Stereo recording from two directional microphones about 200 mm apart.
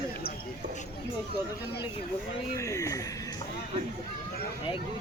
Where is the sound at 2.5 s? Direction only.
15° left (ahead or behind).